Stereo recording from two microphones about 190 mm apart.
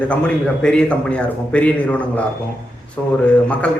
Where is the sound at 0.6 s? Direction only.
5° left (ahead or behind).